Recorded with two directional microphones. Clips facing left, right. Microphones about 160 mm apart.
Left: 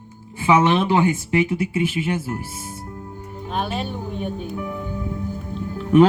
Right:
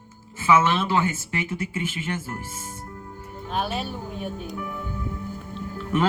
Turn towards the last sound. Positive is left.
turn(degrees=15)  # may be behind; listen again after turning